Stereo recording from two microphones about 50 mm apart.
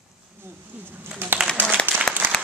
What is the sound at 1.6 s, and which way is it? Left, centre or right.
Applause, right.